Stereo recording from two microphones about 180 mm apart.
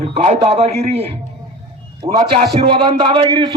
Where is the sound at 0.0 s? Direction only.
35° right (ahead or behind).